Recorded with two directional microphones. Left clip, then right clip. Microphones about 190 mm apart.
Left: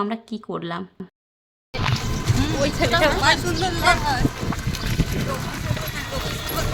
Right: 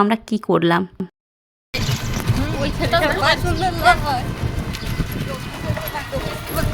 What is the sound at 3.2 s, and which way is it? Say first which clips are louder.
Speech: right 2 dB; 55° right (ahead or behind).